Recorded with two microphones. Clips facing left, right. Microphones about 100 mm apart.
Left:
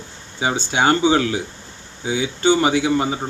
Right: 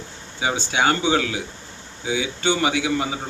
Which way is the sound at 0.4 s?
35° left (ahead or behind).